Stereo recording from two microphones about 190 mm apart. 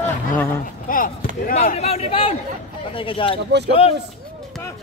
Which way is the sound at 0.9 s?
45° left (ahead or behind).